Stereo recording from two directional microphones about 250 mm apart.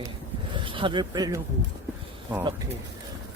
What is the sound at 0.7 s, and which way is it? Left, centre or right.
Speech, centre.